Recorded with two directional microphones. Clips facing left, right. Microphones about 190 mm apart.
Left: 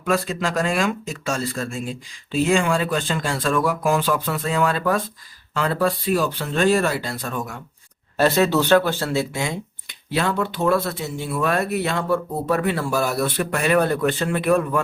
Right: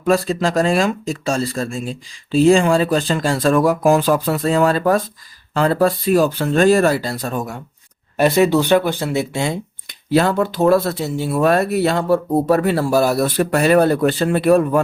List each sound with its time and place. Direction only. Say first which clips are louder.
0.0 s speech: right 6 dB; 35° right (ahead or behind)
8.1 s speech: right 4 dB; 15° right (ahead or behind)
9.3 s speech: right 5 dB; 35° right (ahead or behind)